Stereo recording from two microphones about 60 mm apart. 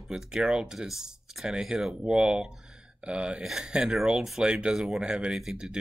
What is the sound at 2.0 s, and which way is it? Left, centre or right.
Speech, centre.